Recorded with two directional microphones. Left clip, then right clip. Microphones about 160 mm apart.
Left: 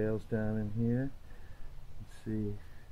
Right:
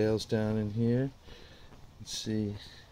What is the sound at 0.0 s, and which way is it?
Speech, 40° right (ahead or behind).